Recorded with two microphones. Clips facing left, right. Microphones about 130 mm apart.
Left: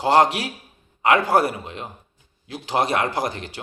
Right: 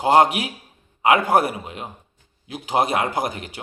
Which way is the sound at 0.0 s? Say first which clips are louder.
Right 1 dB; 20° right (ahead or behind).